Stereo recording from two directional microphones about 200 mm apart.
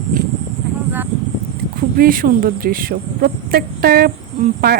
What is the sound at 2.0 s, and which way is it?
Speech, 45° right (ahead or behind).